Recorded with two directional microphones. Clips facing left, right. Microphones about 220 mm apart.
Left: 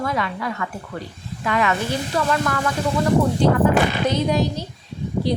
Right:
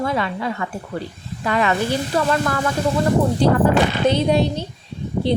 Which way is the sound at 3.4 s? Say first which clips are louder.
Right 1 dB; 35° right (ahead or behind).